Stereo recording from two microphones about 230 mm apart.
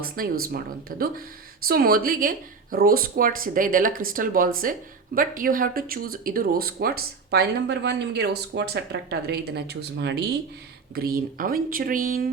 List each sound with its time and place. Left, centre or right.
0.0 s speech: right